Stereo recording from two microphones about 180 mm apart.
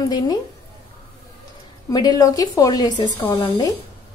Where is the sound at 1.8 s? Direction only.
20° left (ahead or behind).